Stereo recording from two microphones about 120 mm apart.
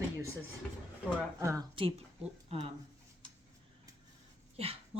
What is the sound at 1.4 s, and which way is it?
Speech, 25° right (ahead or behind).